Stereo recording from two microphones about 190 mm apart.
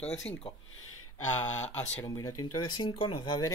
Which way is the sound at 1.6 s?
35° left (ahead or behind).